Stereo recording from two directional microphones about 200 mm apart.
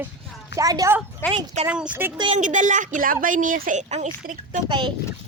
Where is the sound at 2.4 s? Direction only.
40° right (ahead or behind).